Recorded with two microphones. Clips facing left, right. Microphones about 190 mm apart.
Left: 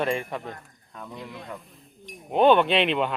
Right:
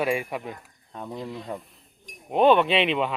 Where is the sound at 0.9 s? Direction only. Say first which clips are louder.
Right 5 dB; 25° right (ahead or behind).